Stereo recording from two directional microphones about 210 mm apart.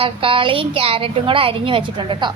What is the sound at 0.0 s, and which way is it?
A woman's voice, 25° right (ahead or behind).